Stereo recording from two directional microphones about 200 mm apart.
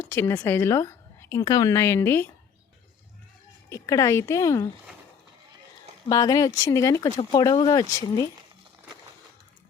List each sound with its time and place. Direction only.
0.0 s a woman's voice: 10° left (ahead or behind)
3.7 s speech: 15° left (ahead or behind)
6.1 s speech: 20° left (ahead or behind)